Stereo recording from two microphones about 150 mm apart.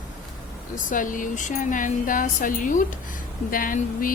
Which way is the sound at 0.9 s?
60° left (ahead or behind).